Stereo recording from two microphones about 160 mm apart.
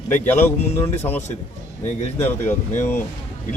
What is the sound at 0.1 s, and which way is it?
Speech, 10° left (ahead or behind).